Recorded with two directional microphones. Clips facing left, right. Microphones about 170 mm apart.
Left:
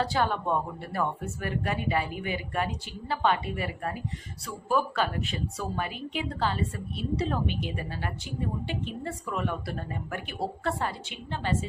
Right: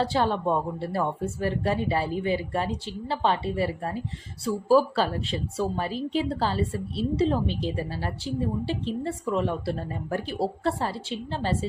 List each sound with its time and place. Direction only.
0.0 s a woman's voice: 30° right (ahead or behind)